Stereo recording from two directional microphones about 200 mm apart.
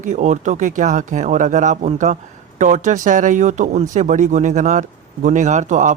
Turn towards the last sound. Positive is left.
turn(degrees=-35)  # may be behind; listen again after turning